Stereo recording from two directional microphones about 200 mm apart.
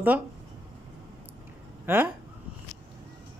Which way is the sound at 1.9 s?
10° right (ahead or behind).